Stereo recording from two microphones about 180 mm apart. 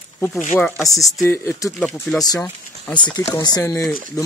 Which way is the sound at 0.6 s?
15° left (ahead or behind).